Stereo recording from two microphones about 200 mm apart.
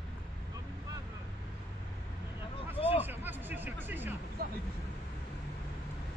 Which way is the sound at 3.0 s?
10° right (ahead or behind).